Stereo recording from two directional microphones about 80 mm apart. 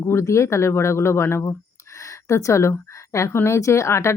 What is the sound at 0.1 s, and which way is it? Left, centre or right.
Speech, left.